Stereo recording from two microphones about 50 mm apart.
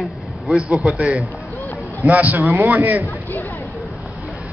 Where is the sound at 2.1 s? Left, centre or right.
Right.